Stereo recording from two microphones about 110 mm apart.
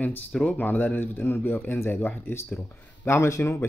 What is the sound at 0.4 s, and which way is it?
Speech, 15° left (ahead or behind).